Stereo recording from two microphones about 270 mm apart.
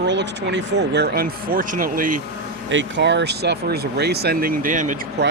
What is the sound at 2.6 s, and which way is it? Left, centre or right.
Speech, right.